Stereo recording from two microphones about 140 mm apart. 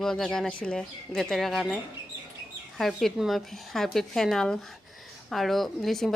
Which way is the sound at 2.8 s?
Centre (ahead or behind).